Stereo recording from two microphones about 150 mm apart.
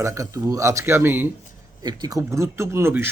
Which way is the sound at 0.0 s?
20° right (ahead or behind).